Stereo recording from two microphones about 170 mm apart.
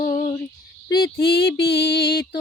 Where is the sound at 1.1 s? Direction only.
65° left (ahead or behind).